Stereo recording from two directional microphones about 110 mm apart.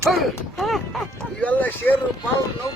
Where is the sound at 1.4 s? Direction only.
15° left (ahead or behind).